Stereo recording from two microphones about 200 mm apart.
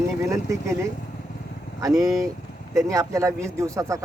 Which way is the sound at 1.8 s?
15° right (ahead or behind).